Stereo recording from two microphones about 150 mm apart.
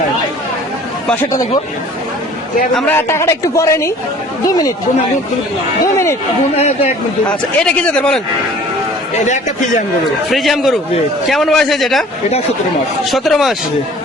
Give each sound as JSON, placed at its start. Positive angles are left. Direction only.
{"t": 2.7, "sound": "a woman's voice", "side_deg": 10}
{"t": 5.8, "sound": "a woman's voice", "side_deg": 20}
{"t": 6.6, "sound": "speech", "side_deg": 45}
{"t": 7.3, "sound": "speech", "side_deg": 5}
{"t": 9.2, "sound": "a man's voice", "side_deg": 55}
{"t": 10.2, "sound": "a man's voice", "side_deg": 0}
{"t": 13.1, "sound": "a man's voice", "side_deg": 0}